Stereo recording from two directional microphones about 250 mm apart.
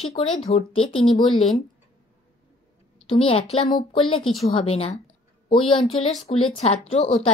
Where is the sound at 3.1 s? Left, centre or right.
Left.